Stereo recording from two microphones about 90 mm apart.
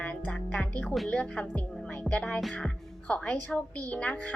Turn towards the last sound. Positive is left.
turn(degrees=15)  # may be behind; listen again after turning